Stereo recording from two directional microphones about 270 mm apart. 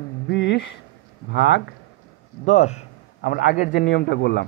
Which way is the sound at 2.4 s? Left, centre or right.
Left.